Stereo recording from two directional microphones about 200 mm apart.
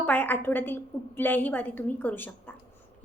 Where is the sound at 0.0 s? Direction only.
10° left (ahead or behind).